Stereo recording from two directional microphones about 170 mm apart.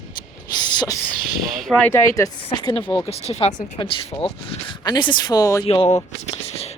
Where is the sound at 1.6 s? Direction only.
10° left (ahead or behind).